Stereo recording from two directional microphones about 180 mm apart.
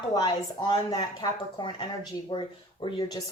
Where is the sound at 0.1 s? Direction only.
20° left (ahead or behind).